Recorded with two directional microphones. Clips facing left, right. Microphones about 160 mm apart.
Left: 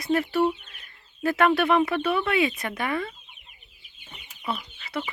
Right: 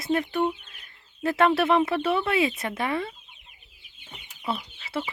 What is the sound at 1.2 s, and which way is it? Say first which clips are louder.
Speech: even; 25° right (ahead or behind).